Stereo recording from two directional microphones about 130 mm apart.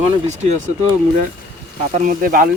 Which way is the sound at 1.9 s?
85° right.